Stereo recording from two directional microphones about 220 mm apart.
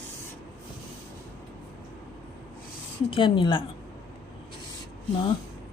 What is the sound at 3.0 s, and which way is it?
Speech, 20° left (ahead or behind).